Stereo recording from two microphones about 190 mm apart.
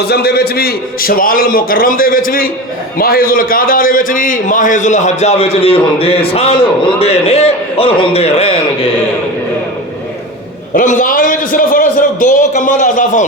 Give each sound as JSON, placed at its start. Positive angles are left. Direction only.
{"t": 0.0, "sound": "a man's voice", "side_deg": 60}
{"t": 10.8, "sound": "a man's voice", "side_deg": 45}